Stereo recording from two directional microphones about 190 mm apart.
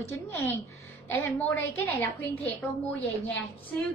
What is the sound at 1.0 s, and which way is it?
A woman's voice, 10° left (ahead or behind).